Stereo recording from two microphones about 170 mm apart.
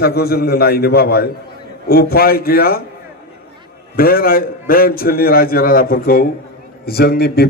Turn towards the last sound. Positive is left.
turn(degrees=70)  # may be behind; listen again after turning